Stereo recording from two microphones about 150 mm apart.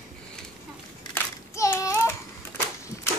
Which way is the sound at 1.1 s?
20° left (ahead or behind).